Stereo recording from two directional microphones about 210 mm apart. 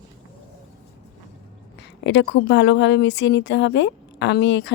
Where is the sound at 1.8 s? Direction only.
55° left (ahead or behind).